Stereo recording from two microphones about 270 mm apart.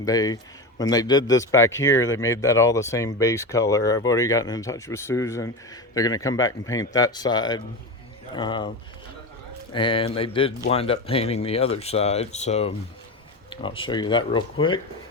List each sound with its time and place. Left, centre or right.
0.0 s speech: centre
9.7 s speech: centre